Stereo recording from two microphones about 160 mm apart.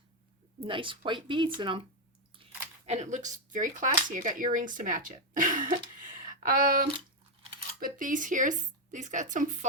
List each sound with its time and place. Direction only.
0.6 s speech: 30° right (ahead or behind)
2.4 s a sound: 35° right (ahead or behind)
2.8 s speech: 45° right (ahead or behind)